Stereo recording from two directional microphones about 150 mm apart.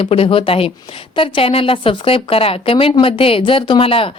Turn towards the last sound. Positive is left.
turn(degrees=40)  # may be behind; listen again after turning